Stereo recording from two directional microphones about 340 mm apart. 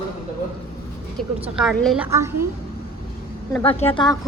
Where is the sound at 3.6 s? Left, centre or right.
Centre.